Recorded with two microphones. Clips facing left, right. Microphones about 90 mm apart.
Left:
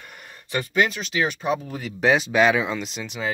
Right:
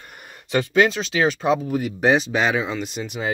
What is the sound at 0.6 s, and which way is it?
Speech, 90° right.